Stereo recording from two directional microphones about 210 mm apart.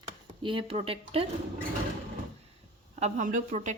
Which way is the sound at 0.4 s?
25° right (ahead or behind).